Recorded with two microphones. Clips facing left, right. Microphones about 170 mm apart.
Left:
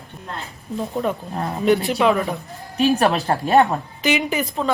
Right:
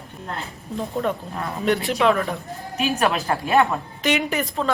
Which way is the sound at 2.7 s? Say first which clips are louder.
Left 4 dB; 35° left (ahead or behind).